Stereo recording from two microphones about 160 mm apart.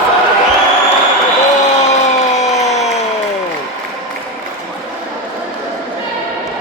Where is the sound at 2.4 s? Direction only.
45° left (ahead or behind).